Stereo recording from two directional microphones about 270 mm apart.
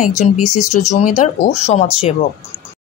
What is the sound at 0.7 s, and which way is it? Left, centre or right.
Speech, left.